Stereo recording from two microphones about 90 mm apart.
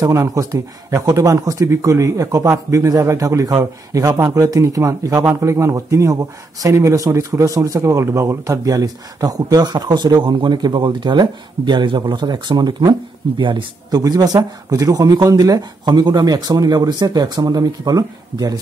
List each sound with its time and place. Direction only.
0.0 s speech: 35° right (ahead or behind)
13.4 s speech: 65° right (ahead or behind)
13.9 s speech: 45° right (ahead or behind)